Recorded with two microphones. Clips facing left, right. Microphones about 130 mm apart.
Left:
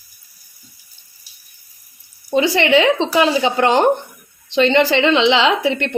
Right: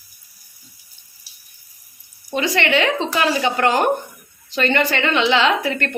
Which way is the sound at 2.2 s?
30° left (ahead or behind).